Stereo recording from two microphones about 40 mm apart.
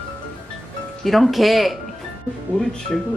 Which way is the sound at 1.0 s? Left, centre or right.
Centre.